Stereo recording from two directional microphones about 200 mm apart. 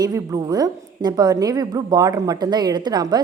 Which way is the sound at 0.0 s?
15° right (ahead or behind).